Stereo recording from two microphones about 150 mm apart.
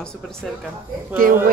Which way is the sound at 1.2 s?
70° right (ahead or behind).